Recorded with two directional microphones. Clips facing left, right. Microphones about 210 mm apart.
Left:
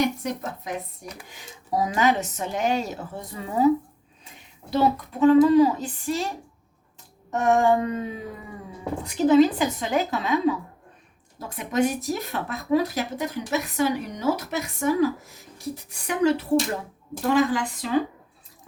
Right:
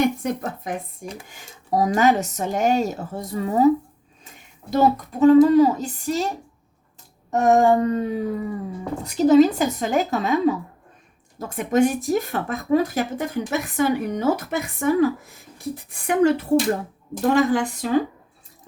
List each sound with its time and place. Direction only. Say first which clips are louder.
0.0 s speech: right 3 dB; 50° right (ahead or behind)
4.7 s speech: right 3 dB; 45° right (ahead or behind)